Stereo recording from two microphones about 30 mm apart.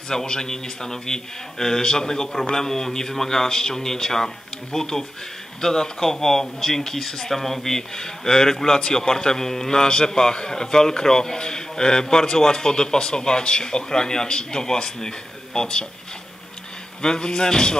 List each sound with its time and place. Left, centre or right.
0.1 s a man's voice: centre
17.0 s a man's voice: left